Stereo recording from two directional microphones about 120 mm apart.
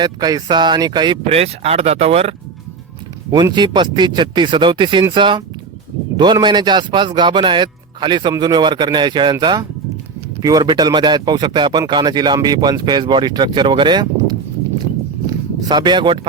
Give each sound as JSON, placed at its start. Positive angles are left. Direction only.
{"t": 0.0, "sound": "speech", "side_deg": -35}
{"t": 1.3, "sound": "speech", "side_deg": -55}
{"t": 3.3, "sound": "speech", "side_deg": -35}
{"t": 15.3, "sound": "a sound", "side_deg": -35}